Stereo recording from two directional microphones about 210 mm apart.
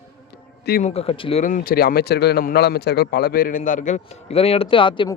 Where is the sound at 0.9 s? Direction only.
30° left (ahead or behind).